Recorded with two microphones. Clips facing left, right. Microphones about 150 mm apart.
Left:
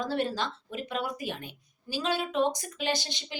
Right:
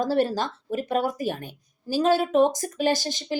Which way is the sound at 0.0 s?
40° right (ahead or behind).